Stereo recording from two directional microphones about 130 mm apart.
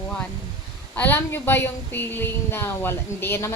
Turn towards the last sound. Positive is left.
turn(degrees=20)  # may be behind; listen again after turning